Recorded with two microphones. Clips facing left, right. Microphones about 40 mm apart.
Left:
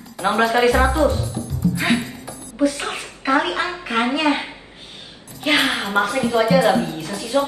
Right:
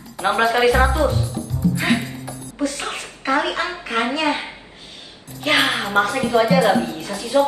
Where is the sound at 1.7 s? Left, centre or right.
Centre.